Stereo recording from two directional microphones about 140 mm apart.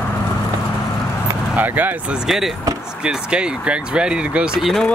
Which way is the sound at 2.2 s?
Centre (ahead or behind).